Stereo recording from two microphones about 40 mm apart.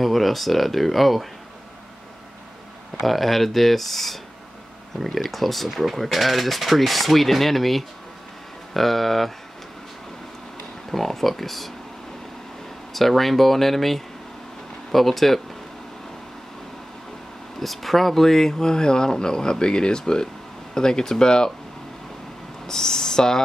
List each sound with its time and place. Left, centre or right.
0.0 s speech: centre
3.0 s speech: centre
10.9 s speech: centre
12.9 s speech: centre
17.6 s speech: centre
22.7 s speech: centre